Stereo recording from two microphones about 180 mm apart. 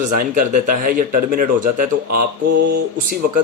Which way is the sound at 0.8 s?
50° right (ahead or behind).